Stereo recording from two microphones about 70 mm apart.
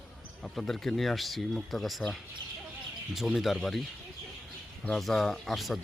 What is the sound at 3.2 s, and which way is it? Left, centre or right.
Speech, centre.